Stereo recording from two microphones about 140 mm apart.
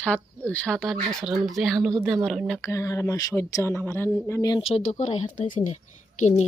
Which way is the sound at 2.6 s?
20° left (ahead or behind).